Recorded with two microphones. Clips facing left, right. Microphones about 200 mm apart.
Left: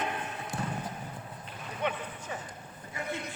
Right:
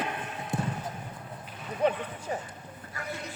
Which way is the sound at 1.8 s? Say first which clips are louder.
Right 7 dB; 35° right (ahead or behind).